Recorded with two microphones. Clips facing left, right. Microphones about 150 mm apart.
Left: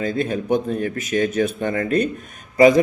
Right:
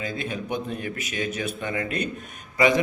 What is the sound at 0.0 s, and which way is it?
A man's voice, 45° left (ahead or behind).